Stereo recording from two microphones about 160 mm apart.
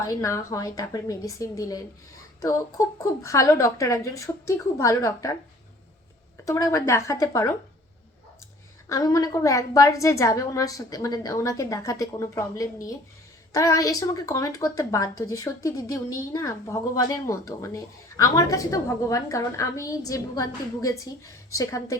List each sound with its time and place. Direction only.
0.0 s a woman's voice: 20° left (ahead or behind)
6.4 s a woman's voice: 20° left (ahead or behind)
8.9 s a woman's voice: 20° left (ahead or behind)